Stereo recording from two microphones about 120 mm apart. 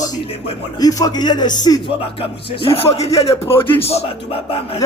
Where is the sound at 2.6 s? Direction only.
50° left (ahead or behind).